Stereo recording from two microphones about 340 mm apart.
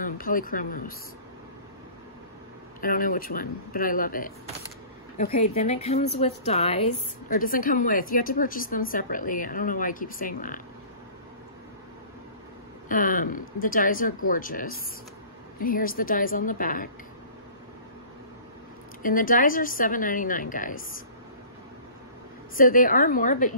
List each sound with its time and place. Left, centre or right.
0.0 s speech: left
2.8 s a woman's voice: left
12.8 s a woman's voice: left
19.0 s a woman's voice: left
22.6 s a woman's voice: left